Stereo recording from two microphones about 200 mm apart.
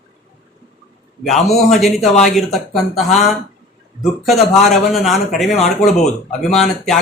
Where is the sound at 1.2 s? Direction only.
Centre (ahead or behind).